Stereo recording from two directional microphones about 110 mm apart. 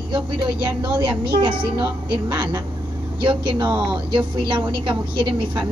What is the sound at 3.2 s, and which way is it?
A woman's voice, 50° right (ahead or behind).